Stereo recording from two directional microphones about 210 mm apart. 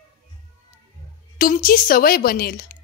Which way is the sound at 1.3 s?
40° left (ahead or behind).